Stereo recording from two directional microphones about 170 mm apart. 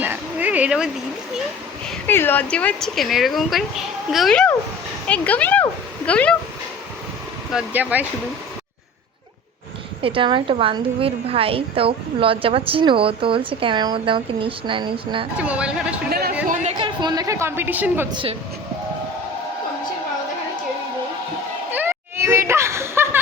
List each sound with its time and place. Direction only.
0.0 s a sound: 10° right (ahead or behind)
1.9 s speech: 10° left (ahead or behind)
7.5 s a woman's voice: 10° right (ahead or behind)
10.0 s a woman's voice: 30° right (ahead or behind)
15.4 s a woman's voice: 5° right (ahead or behind)
16.0 s speech: 65° right (ahead or behind)
16.7 s a woman's voice: 25° right (ahead or behind)
18.1 s speech: 30° right (ahead or behind)
21.7 s a sound: 10° right (ahead or behind)